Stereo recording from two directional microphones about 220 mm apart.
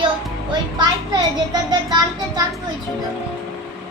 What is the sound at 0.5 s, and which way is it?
Speech, 20° right (ahead or behind).